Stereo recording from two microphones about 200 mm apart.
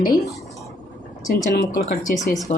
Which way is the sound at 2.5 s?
35° left (ahead or behind).